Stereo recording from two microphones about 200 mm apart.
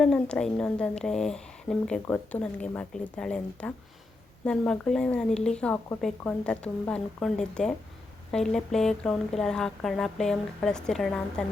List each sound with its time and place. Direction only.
0.0 s a woman's voice: 5° left (ahead or behind)